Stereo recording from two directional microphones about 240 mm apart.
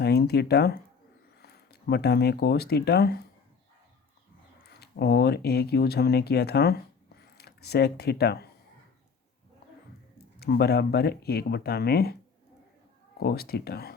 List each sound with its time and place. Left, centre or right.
0.0 s speech: left
4.6 s speech: left
10.2 s speech: left
13.1 s speech: left